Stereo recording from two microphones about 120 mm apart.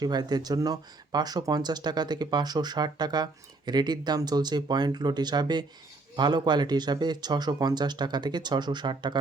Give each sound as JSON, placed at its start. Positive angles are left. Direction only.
{"t": 0.0, "sound": "speech", "side_deg": -35}